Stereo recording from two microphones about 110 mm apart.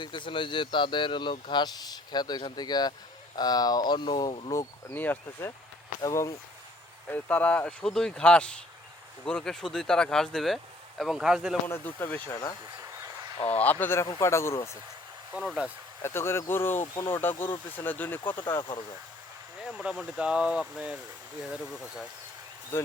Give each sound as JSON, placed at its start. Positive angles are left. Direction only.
{"t": 0.0, "sound": "speech", "side_deg": 45}
{"t": 4.9, "sound": "speech", "side_deg": 15}
{"t": 6.0, "sound": "speech", "side_deg": 30}
{"t": 7.1, "sound": "speech", "side_deg": 15}
{"t": 11.7, "sound": "speech", "side_deg": 20}
{"t": 12.8, "sound": "a sound", "side_deg": -30}
{"t": 13.6, "sound": "speech", "side_deg": 15}
{"t": 15.4, "sound": "speech", "side_deg": -5}
{"t": 16.0, "sound": "speech", "side_deg": 25}
{"t": 19.6, "sound": "speech", "side_deg": -5}
{"t": 22.7, "sound": "speech", "side_deg": 20}